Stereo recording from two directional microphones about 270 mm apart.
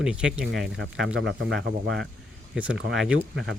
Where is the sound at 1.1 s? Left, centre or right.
Right.